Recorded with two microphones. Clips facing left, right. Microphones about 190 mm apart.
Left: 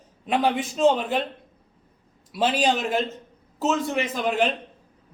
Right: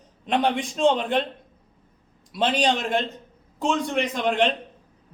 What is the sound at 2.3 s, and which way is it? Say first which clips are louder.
A man's voice: even; 5° left (ahead or behind).